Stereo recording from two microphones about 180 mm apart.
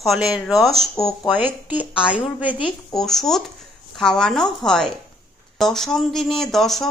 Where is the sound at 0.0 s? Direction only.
Centre (ahead or behind).